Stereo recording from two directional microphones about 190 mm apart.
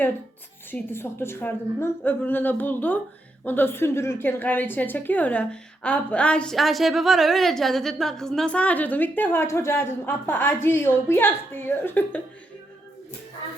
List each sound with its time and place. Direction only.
0.7 s a woman's voice: 10° left (ahead or behind)